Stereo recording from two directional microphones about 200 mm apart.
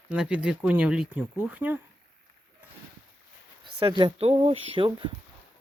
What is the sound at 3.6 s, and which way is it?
Speech, 25° right (ahead or behind).